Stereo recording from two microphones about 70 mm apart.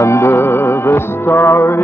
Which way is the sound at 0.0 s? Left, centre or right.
Left.